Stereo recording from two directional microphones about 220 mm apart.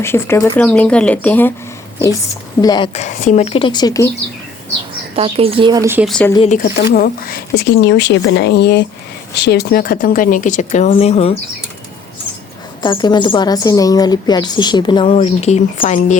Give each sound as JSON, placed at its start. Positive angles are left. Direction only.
{"t": 0.0, "sound": "a woman's voice", "side_deg": 10}
{"t": 5.1, "sound": "a woman's voice", "side_deg": -25}
{"t": 6.1, "sound": "speech", "side_deg": 5}
{"t": 6.5, "sound": "speech", "side_deg": 40}
{"t": 12.8, "sound": "a woman's voice", "side_deg": 20}